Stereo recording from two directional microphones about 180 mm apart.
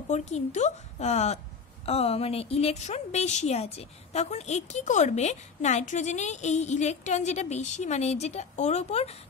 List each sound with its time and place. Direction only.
0.1 s a woman's voice: 40° left (ahead or behind)